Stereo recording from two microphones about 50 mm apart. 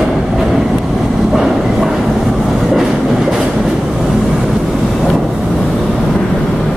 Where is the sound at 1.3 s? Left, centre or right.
Centre.